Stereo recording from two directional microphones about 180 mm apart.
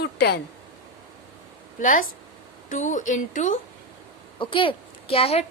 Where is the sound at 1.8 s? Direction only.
50° left (ahead or behind).